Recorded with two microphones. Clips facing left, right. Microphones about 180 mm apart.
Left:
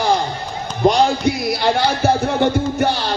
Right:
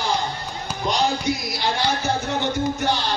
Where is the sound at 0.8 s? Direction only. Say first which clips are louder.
Left 8 dB; 55° left (ahead or behind).